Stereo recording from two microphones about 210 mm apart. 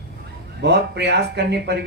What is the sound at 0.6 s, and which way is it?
Speech, 55° right (ahead or behind).